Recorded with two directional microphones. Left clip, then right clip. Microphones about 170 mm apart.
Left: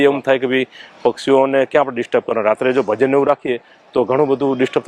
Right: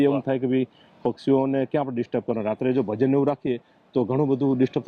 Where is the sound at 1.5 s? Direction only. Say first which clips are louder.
Left 10 dB; 20° left (ahead or behind).